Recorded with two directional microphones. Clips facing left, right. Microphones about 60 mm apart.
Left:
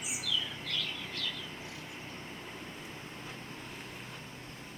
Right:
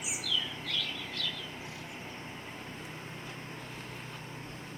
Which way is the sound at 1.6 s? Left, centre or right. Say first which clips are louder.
Right 1 dB; right.